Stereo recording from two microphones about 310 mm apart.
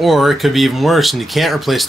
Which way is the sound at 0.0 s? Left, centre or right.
Centre.